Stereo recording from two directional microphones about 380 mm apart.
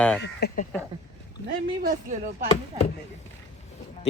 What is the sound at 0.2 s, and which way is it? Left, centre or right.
Speech, left.